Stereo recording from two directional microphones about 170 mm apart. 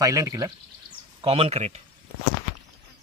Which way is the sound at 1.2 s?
35° right (ahead or behind).